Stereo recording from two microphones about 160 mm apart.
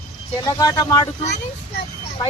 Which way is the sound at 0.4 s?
25° left (ahead or behind).